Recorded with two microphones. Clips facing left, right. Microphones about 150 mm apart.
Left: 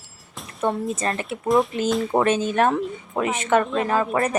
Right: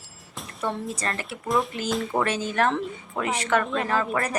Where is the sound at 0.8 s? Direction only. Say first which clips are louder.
Left 5 dB; 25° left (ahead or behind).